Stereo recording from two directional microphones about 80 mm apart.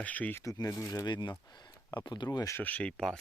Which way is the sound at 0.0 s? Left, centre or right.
Centre.